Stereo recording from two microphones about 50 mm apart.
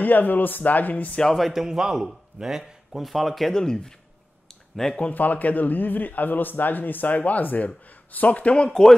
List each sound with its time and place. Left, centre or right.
0.0 s a man's voice: left
1.3 s speech: centre
3.5 s speech: centre
4.5 s a sound: centre
5.1 s a man's voice: left
8.6 s speech: centre